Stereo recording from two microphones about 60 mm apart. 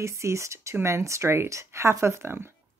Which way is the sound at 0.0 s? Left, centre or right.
Right.